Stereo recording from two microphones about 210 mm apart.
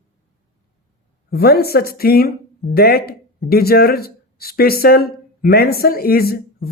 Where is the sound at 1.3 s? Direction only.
45° left (ahead or behind).